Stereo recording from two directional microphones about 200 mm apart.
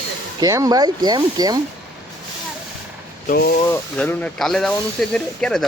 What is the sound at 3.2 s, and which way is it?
Speech, 55° left (ahead or behind).